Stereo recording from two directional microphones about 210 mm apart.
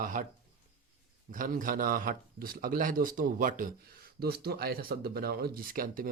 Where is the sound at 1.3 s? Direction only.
40° right (ahead or behind).